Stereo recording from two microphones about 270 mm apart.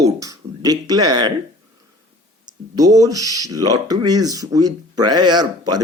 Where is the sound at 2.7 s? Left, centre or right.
Centre.